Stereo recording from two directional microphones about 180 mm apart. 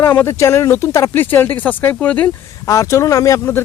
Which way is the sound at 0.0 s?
10° left (ahead or behind).